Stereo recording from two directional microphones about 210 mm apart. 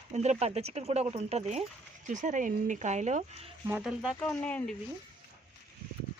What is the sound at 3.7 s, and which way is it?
Speech, 5° right (ahead or behind).